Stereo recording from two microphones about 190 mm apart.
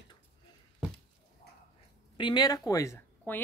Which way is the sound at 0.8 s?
5° right (ahead or behind).